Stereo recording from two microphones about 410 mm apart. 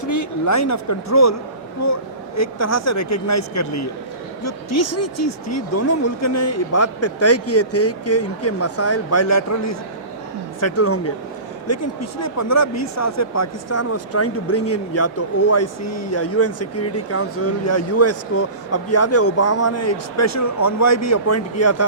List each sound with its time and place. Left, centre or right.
0.0 s speech: left